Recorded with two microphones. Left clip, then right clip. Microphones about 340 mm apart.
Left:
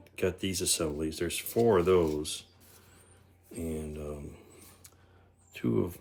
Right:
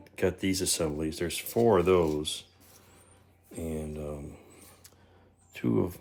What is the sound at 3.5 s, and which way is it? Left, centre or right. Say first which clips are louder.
Speech: right 1 dB; centre.